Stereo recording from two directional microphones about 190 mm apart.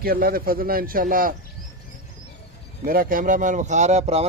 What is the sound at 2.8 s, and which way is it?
Speech, 50° right (ahead or behind).